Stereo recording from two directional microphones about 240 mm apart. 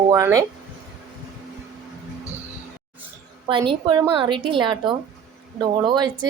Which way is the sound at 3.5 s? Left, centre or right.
Centre.